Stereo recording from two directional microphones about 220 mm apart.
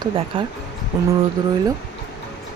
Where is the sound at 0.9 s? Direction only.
10° right (ahead or behind).